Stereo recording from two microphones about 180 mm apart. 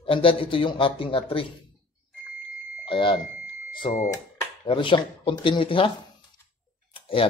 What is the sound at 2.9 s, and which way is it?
Speech, 25° left (ahead or behind).